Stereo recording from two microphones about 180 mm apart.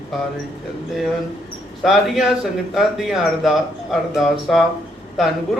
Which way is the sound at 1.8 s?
Centre (ahead or behind).